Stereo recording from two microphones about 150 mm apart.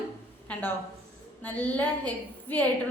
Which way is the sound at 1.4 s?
10° left (ahead or behind).